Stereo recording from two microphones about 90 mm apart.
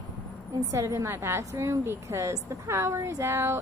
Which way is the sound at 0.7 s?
30° right (ahead or behind).